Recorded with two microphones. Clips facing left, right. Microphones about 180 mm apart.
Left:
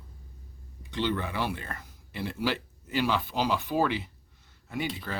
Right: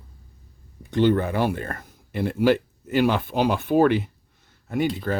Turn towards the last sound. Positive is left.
turn(degrees=-45)  # may be behind; listen again after turning